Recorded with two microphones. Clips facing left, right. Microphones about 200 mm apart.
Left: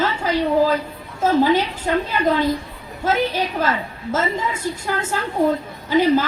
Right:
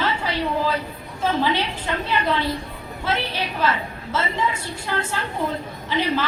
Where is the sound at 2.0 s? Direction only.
45° left (ahead or behind).